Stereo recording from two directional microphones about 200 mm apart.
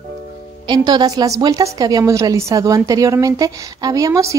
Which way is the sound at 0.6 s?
20° right (ahead or behind).